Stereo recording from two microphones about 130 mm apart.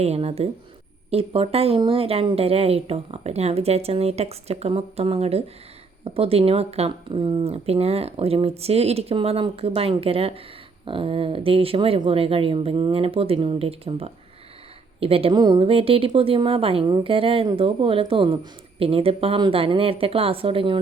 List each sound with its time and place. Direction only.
0.0 s speech: 55° right (ahead or behind)
7.5 s speech: 50° right (ahead or behind)